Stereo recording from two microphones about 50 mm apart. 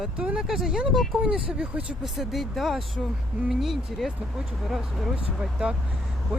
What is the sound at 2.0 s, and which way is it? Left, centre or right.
Speech, centre.